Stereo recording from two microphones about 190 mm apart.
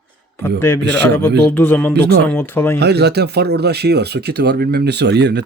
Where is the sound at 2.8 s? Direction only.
60° right (ahead or behind).